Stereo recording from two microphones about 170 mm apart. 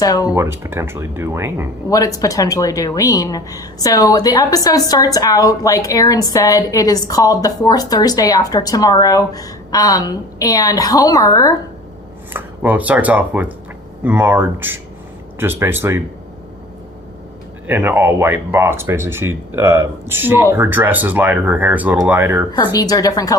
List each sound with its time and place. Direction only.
0.0 s speech: 20° left (ahead or behind)
0.3 s speech: 15° right (ahead or behind)
1.9 s speech: 20° left (ahead or behind)
12.3 s speech: 10° right (ahead or behind)
17.7 s speech: 10° right (ahead or behind)
22.5 s speech: 20° left (ahead or behind)